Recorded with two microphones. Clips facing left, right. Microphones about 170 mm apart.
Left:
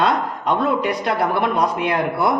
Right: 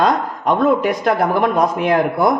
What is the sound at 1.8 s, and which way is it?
Speech, 45° right (ahead or behind).